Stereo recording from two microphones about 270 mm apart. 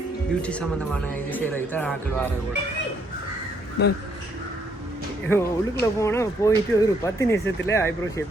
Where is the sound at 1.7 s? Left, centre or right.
Centre.